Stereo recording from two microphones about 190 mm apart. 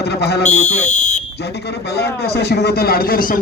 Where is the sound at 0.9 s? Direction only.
40° left (ahead or behind).